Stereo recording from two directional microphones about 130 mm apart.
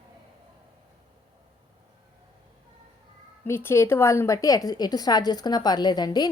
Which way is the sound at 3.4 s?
15° left (ahead or behind).